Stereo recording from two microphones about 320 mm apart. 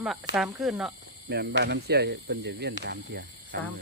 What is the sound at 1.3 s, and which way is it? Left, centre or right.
Speech, right.